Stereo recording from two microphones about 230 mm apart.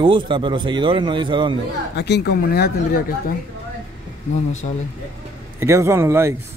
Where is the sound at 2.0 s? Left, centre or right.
Left.